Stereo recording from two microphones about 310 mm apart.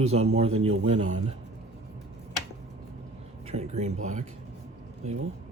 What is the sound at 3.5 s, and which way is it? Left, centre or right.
Speech, right.